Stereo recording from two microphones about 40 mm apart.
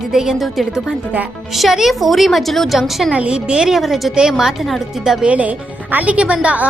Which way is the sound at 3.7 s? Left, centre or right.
Centre.